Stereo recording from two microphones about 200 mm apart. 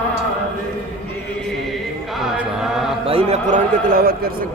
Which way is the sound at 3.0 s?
30° right (ahead or behind).